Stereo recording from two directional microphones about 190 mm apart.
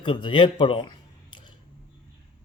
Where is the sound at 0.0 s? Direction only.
25° left (ahead or behind).